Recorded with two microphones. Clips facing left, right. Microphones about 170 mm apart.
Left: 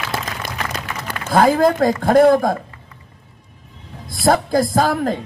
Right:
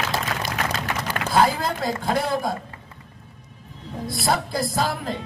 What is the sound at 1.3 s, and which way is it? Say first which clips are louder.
Speech: left 7 dB; 50° left (ahead or behind).